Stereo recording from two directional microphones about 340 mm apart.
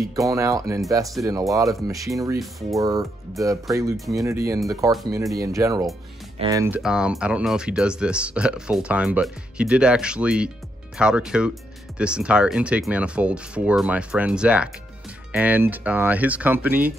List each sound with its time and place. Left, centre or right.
0.1 s speech: centre